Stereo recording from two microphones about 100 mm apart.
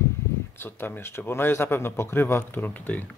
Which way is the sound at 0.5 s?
20° left (ahead or behind).